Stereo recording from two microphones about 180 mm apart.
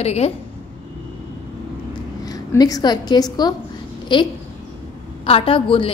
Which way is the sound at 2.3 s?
20° left (ahead or behind).